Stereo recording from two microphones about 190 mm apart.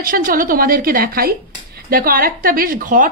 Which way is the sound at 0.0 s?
50° right (ahead or behind).